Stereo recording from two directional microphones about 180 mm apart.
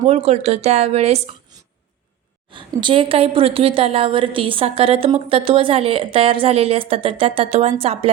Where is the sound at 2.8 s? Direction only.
30° right (ahead or behind).